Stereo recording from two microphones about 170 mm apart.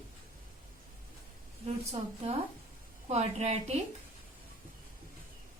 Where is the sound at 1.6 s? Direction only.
40° right (ahead or behind).